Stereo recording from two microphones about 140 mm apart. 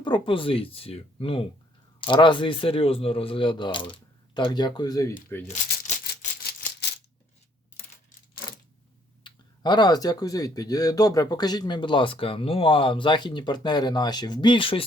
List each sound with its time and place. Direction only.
0.0 s speech: 35° left (ahead or behind)
9.2 s speech: 30° left (ahead or behind)